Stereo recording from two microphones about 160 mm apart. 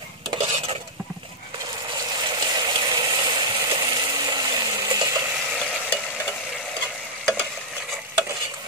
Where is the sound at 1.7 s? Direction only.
25° right (ahead or behind).